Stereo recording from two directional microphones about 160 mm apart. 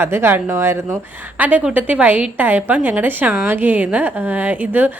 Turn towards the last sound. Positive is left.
turn(degrees=-10)  # may be behind; listen again after turning